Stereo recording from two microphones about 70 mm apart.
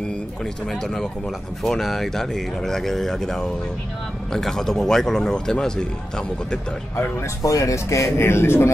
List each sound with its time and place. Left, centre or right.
0.7 s speech: centre
7.4 s speech: left